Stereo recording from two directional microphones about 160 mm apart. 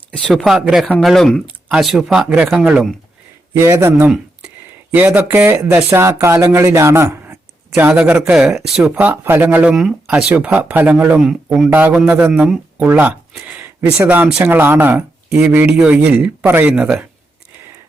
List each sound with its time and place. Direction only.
0.1 s speech: 5° left (ahead or behind)
3.5 s speech: 15° right (ahead or behind)